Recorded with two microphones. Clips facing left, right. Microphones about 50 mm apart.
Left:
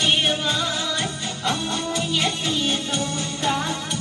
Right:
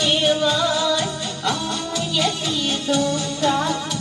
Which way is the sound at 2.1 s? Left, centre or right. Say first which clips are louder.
Right 3 dB; left.